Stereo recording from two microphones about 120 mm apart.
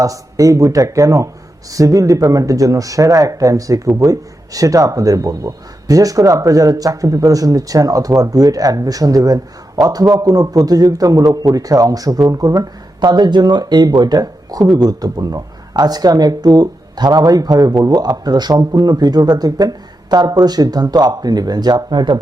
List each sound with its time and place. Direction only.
0.0 s speech: 30° right (ahead or behind)